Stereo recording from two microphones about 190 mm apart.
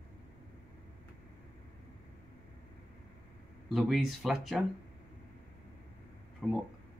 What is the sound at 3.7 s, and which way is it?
Speech, centre (ahead or behind).